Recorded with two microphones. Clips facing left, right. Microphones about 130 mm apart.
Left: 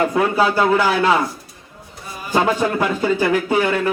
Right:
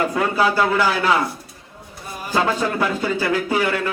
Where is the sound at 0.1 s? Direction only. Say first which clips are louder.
Left 2 dB; 20° left (ahead or behind).